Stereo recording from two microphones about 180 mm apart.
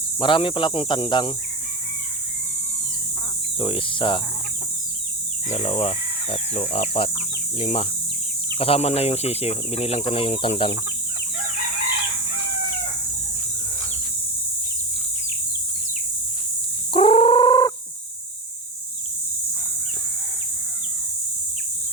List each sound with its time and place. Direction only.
0.2 s speech: 30° left (ahead or behind)
3.6 s speech: 30° left (ahead or behind)
5.5 s speech: 35° left (ahead or behind)
16.9 s a sound: 30° left (ahead or behind)